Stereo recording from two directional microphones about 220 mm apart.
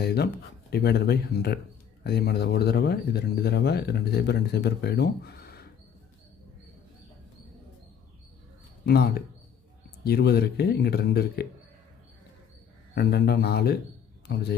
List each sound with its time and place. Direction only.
0.0 s speech: 45° left (ahead or behind)
8.9 s speech: 45° left (ahead or behind)
12.9 s speech: 45° left (ahead or behind)